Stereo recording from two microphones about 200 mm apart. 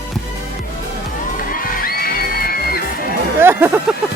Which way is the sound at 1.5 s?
45° left (ahead or behind).